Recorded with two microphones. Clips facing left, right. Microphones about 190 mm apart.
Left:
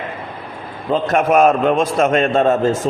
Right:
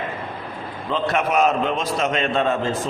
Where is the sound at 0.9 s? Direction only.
45° left (ahead or behind).